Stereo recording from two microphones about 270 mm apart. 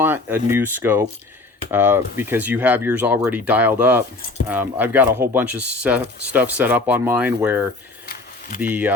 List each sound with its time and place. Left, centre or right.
0.0 s speech: centre
8.0 s a sound: left
8.6 s speech: centre